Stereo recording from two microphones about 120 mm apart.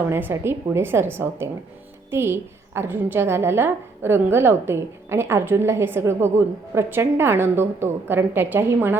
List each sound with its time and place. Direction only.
0.1 s a woman's voice: 20° right (ahead or behind)